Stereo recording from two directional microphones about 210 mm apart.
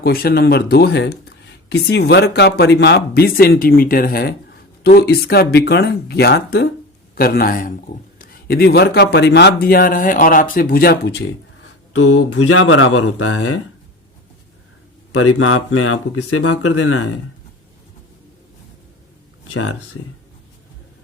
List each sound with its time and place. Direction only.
0.0 s speech: 45° left (ahead or behind)
11.9 s speech: 65° left (ahead or behind)
15.1 s speech: 90° left
19.5 s speech: 75° left (ahead or behind)